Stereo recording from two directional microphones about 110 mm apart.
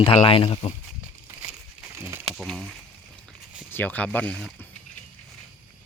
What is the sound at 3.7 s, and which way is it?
Speech, 15° left (ahead or behind).